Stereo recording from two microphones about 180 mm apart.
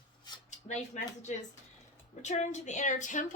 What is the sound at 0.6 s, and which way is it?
A woman's voice, 40° left (ahead or behind).